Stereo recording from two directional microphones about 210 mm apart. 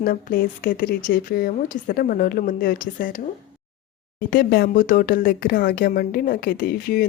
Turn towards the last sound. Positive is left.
turn(degrees=45)  # may be behind; listen again after turning